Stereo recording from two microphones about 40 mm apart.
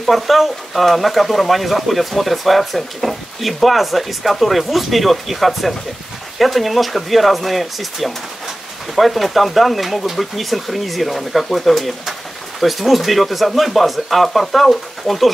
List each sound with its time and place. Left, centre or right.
0.0 s speech: centre